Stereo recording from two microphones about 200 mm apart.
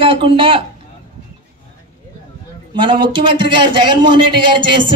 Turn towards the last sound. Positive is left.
turn(degrees=-25)  # may be behind; listen again after turning